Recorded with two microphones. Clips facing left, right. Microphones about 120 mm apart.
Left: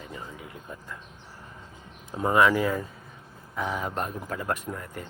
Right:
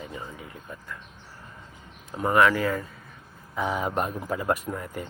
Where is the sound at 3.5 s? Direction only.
10° right (ahead or behind).